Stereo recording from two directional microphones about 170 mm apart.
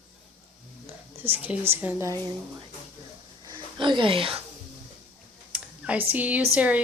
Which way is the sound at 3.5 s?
30° right (ahead or behind).